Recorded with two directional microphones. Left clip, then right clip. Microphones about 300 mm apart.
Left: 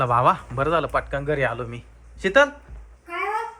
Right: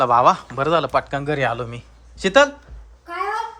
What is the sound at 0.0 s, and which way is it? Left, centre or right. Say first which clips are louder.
Speech: right 4 dB; centre.